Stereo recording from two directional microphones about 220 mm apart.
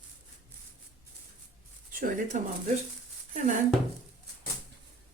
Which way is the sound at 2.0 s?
35° right (ahead or behind).